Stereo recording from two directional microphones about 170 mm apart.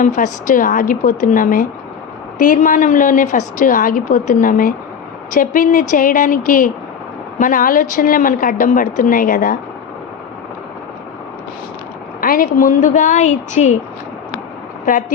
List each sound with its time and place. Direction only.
0.0 s a woman's voice: 50° left (ahead or behind)
12.2 s a woman's voice: 55° left (ahead or behind)